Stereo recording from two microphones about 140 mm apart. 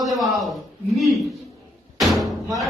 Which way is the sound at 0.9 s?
Centre (ahead or behind).